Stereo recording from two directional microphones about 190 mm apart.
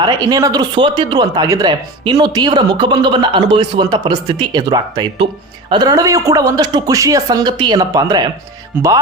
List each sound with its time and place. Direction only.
0.0 s a man's voice: 20° right (ahead or behind)